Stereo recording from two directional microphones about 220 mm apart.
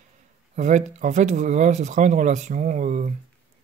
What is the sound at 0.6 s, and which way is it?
Speech, 35° right (ahead or behind).